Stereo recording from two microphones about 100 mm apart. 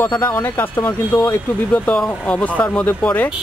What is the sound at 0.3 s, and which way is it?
Speech, 20° left (ahead or behind).